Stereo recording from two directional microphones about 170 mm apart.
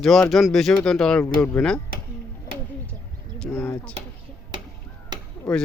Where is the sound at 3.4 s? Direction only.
15° left (ahead or behind).